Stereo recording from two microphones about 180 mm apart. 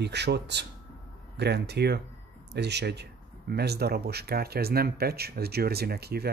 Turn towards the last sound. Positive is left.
turn(degrees=-60)  # may be behind; listen again after turning